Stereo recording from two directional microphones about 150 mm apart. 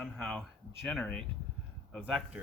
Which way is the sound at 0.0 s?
Centre (ahead or behind).